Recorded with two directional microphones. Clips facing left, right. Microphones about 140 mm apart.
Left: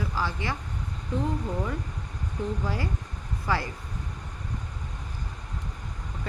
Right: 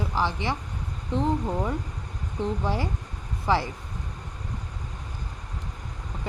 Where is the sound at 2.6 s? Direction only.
20° right (ahead or behind).